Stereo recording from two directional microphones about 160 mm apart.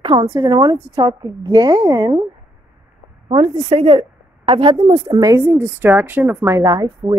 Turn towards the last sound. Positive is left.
turn(degrees=-25)  # may be behind; listen again after turning